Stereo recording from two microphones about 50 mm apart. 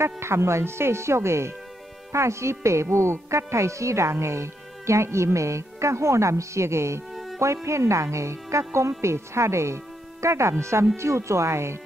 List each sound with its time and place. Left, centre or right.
0.0 s speech: right